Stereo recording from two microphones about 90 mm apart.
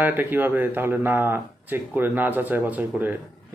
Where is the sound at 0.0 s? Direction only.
20° right (ahead or behind).